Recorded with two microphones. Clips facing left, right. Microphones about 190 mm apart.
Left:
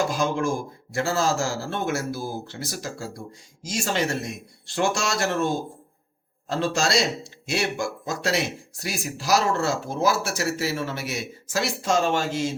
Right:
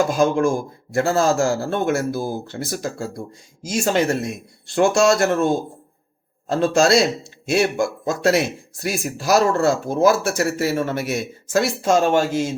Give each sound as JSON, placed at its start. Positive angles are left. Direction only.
{"t": 0.2, "sound": "a man's voice", "side_deg": -50}
{"t": 6.5, "sound": "a man's voice", "side_deg": -55}